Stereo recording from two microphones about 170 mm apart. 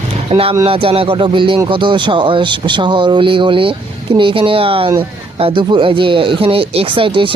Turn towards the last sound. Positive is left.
turn(degrees=-30)  # may be behind; listen again after turning